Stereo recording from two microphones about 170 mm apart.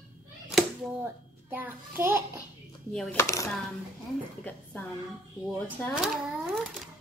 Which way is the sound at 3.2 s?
15° left (ahead or behind).